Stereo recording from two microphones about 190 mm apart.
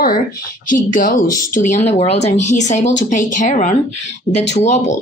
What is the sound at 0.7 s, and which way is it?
A woman's voice, 45° left (ahead or behind).